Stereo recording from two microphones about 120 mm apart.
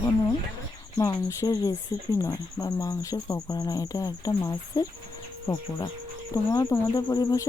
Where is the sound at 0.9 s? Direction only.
30° left (ahead or behind).